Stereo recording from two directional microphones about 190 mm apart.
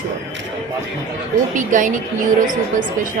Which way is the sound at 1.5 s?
45° right (ahead or behind).